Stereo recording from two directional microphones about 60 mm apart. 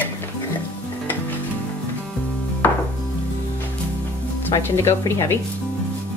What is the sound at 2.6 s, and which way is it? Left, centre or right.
Chopping, left.